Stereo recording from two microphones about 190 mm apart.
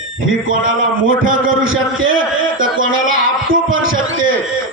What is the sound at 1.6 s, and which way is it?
Speech, 90° right.